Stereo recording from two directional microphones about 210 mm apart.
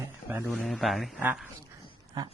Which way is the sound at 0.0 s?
10° right (ahead or behind).